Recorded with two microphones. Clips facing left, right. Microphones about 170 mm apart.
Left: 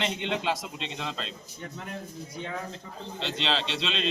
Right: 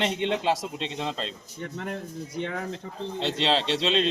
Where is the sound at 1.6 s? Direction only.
65° right (ahead or behind).